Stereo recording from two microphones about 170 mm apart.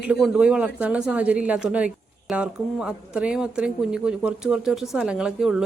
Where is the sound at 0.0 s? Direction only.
5° right (ahead or behind).